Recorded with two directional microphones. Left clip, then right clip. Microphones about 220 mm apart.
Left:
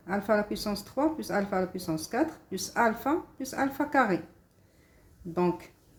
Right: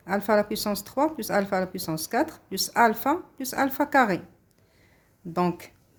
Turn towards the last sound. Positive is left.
turn(degrees=-50)  # may be behind; listen again after turning